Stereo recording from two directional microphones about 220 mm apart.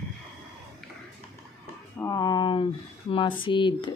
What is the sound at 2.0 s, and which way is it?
Speech, 15° left (ahead or behind).